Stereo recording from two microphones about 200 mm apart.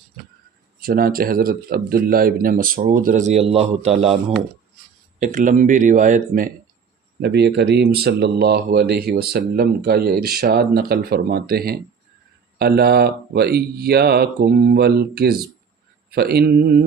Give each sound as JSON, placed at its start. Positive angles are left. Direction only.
{"t": 0.8, "sound": "speech", "side_deg": -45}
{"t": 5.2, "sound": "speech", "side_deg": -40}
{"t": 7.2, "sound": "speech", "side_deg": -55}